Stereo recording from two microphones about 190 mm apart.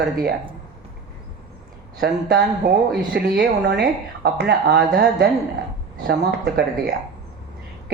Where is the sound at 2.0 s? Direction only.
55° right (ahead or behind).